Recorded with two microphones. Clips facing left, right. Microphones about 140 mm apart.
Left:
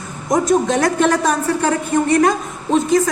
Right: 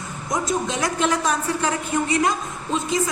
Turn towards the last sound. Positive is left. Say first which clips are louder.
# left 8 dB
turn(degrees=60)  # may be behind; listen again after turning